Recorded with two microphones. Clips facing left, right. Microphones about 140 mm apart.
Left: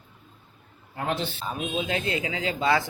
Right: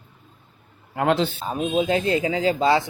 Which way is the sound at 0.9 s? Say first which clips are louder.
Right 8 dB; 90° right.